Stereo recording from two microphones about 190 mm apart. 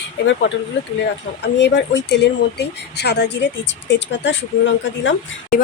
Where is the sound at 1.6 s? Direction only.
65° left (ahead or behind).